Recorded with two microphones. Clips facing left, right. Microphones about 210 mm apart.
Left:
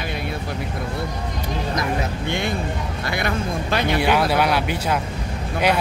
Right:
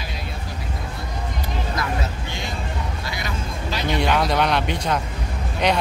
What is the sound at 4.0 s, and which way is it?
Speech, 5° left (ahead or behind).